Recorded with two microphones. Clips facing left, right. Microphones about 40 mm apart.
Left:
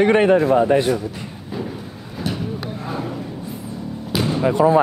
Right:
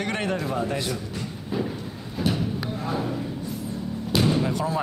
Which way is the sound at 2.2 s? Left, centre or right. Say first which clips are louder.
Even; centre.